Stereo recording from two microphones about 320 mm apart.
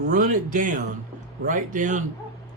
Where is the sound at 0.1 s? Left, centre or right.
Right.